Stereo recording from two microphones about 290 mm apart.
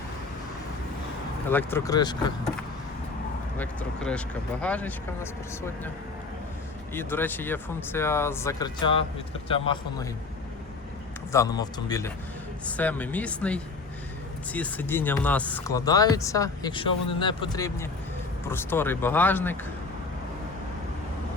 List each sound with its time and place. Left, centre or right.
1.5 s speech: centre
3.6 s speech: centre
6.9 s speech: centre
11.3 s speech: centre